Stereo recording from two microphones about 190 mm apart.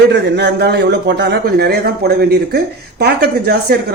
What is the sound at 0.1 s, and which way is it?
A woman's voice, 60° right (ahead or behind).